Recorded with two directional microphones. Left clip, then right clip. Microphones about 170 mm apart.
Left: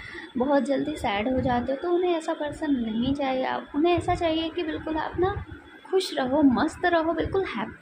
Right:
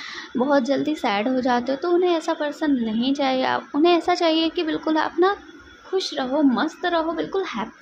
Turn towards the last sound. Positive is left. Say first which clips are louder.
# right 2 dB
turn(degrees=-10)  # may be behind; listen again after turning